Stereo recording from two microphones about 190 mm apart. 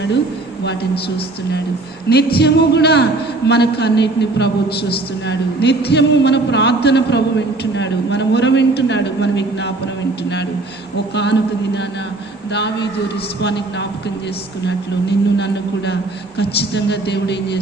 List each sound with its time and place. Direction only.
2.0 s a man's voice: 60° left (ahead or behind)
10.9 s a man's voice: 65° left (ahead or behind)